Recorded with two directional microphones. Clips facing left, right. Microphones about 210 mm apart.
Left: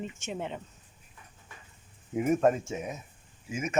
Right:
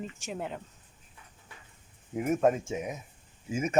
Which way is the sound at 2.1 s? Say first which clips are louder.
Left 1 dB; centre (ahead or behind).